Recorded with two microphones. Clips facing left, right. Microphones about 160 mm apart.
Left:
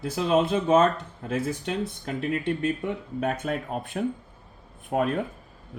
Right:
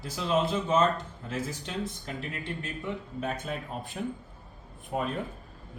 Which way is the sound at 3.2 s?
60° left (ahead or behind).